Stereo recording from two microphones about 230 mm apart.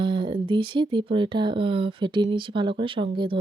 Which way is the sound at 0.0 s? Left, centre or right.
Centre.